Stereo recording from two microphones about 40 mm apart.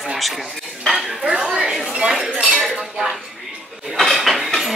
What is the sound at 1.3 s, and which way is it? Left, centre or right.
Speech, right.